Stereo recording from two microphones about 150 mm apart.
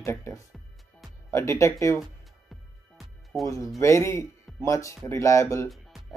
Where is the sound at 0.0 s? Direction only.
20° left (ahead or behind).